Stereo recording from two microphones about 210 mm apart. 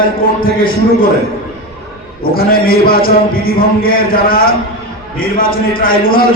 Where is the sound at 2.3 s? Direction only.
45° left (ahead or behind).